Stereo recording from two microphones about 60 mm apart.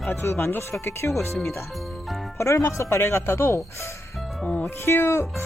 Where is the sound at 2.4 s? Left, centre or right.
Left.